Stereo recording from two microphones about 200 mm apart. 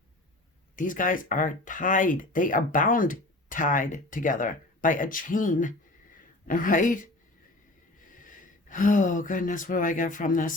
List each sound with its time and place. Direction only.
0.8 s speech: 40° left (ahead or behind)